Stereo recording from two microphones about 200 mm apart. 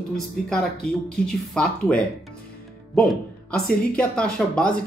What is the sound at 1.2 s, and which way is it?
Speech, 5° left (ahead or behind).